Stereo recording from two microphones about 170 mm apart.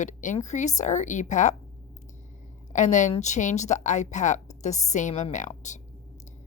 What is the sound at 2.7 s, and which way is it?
A woman's voice, 45° left (ahead or behind).